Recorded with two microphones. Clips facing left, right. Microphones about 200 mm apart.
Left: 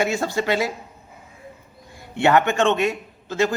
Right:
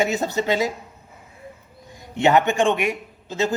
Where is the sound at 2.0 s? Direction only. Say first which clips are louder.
Even; 15° right (ahead or behind).